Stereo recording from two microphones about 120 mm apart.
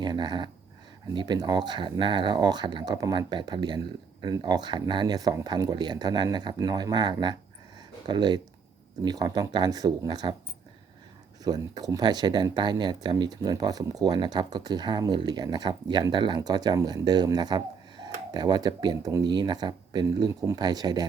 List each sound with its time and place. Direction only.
0.0 s speech: 40° right (ahead or behind)
11.4 s speech: 35° right (ahead or behind)